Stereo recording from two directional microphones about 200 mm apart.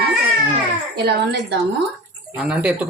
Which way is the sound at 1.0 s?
55° right (ahead or behind).